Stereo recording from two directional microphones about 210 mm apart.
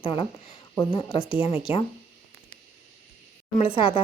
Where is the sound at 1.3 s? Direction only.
25° left (ahead or behind).